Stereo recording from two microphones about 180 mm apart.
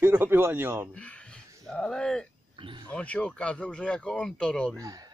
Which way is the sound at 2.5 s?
25° right (ahead or behind).